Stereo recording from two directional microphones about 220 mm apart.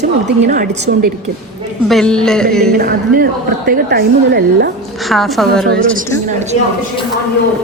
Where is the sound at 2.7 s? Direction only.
45° right (ahead or behind).